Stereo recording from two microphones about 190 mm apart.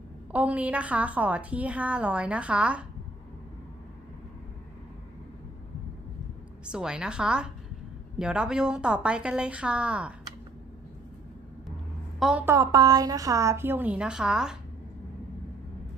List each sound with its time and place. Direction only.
0.3 s a woman's voice: 5° right (ahead or behind)
6.7 s a woman's voice: 5° right (ahead or behind)
12.2 s a woman's voice: 5° right (ahead or behind)